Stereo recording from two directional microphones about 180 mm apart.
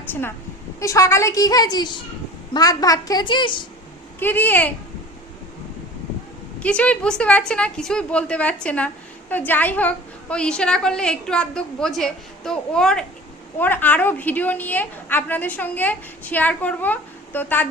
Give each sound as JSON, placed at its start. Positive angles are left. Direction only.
{"t": 0.1, "sound": "a woman's voice", "side_deg": 10}
{"t": 4.2, "sound": "a woman's voice", "side_deg": 10}
{"t": 6.6, "sound": "a woman's voice", "side_deg": 5}